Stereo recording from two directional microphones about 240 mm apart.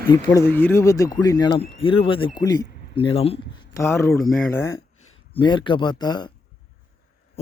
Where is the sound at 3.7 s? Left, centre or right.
Centre.